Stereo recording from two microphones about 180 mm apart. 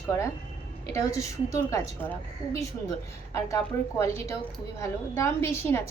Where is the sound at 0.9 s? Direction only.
15° left (ahead or behind).